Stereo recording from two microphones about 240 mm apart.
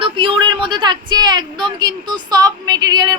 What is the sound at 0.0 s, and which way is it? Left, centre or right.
A woman's voice, right.